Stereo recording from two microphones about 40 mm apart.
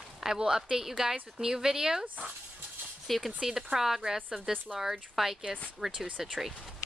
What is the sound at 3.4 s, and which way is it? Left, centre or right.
Speech, centre.